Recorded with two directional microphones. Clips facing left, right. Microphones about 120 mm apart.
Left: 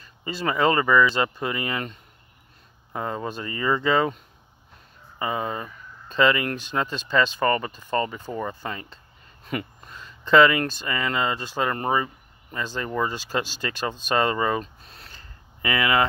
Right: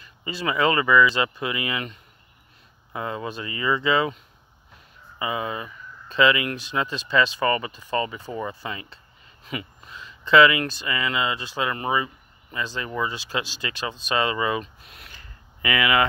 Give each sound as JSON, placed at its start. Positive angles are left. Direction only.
{"t": 0.0, "sound": "speech", "side_deg": 40}
{"t": 5.2, "sound": "speech", "side_deg": 40}